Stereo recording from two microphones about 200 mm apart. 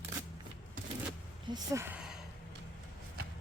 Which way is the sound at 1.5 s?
15° right (ahead or behind).